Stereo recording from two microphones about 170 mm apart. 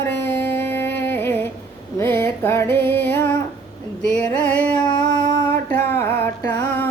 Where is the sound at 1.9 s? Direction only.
15° left (ahead or behind).